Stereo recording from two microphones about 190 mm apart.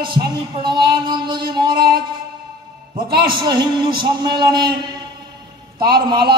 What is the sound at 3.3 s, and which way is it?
Speech, 25° right (ahead or behind).